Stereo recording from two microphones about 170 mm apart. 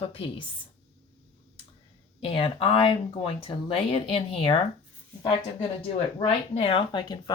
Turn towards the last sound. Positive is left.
turn(degrees=30)  # may be behind; listen again after turning